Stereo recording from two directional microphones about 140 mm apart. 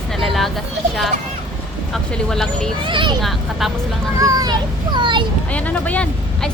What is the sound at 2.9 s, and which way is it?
Speech, 35° right (ahead or behind).